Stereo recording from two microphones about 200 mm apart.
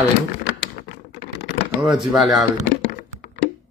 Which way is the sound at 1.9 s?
Centre (ahead or behind).